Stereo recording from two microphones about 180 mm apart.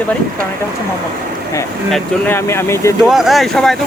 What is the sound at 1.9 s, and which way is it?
Speech, 10° left (ahead or behind).